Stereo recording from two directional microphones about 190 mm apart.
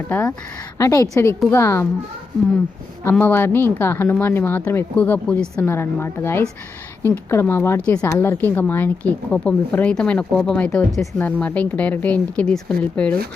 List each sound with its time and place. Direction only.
0.1 s speech: 10° left (ahead or behind)
3.0 s speech: 10° left (ahead or behind)